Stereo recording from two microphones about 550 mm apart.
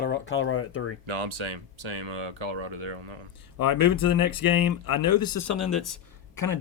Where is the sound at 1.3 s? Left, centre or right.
Right.